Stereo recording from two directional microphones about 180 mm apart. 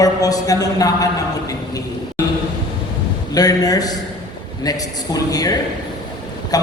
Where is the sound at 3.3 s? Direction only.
20° left (ahead or behind).